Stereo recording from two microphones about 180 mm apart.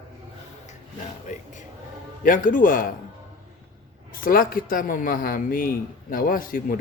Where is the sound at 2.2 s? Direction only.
50° left (ahead or behind).